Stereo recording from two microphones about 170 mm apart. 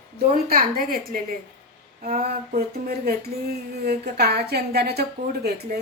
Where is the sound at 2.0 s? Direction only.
60° right (ahead or behind).